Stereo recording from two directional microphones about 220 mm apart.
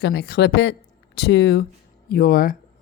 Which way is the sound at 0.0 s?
45° left (ahead or behind).